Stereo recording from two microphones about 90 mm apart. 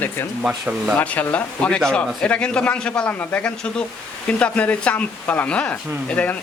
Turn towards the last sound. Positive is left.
turn(degrees=15)  # may be behind; listen again after turning